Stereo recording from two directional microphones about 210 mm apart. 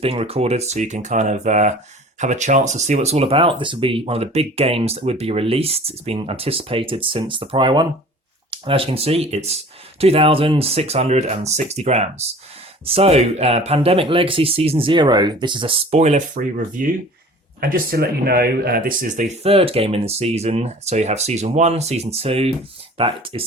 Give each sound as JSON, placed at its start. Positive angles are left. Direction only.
{"t": 0.0, "sound": "speech", "side_deg": -30}